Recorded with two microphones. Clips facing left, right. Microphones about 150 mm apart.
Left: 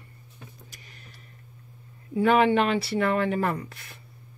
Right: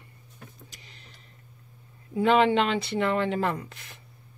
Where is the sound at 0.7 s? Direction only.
50° left (ahead or behind).